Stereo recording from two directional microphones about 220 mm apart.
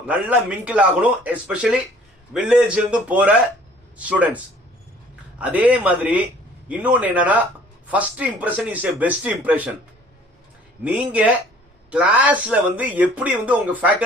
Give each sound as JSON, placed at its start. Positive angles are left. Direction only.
{"t": 0.1, "sound": "speech", "side_deg": -5}
{"t": 5.4, "sound": "speech", "side_deg": -5}
{"t": 10.8, "sound": "speech", "side_deg": -5}